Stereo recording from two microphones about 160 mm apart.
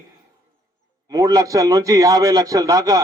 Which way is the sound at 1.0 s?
20° right (ahead or behind).